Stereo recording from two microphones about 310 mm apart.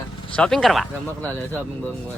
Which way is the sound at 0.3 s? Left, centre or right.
Centre.